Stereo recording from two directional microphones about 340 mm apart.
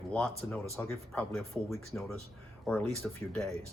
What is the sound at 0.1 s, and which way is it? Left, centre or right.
Speech, centre.